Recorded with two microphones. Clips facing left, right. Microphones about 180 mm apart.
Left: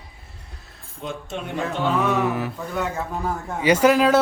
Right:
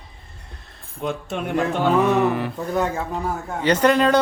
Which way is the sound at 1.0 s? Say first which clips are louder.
Right 5 dB; 60° right (ahead or behind).